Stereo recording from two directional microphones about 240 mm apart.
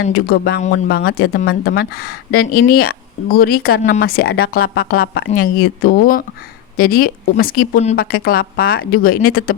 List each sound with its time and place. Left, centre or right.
0.0 s speech: left